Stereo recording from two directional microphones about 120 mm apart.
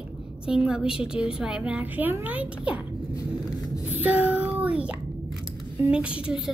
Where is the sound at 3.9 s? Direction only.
15° right (ahead or behind).